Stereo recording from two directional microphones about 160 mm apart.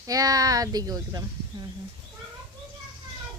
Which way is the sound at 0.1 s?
20° right (ahead or behind).